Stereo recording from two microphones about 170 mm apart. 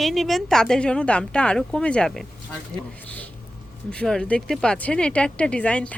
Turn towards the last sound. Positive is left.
turn(degrees=5)  # may be behind; listen again after turning